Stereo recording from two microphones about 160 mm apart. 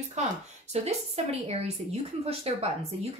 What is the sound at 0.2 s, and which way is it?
Speech, 45° right (ahead or behind).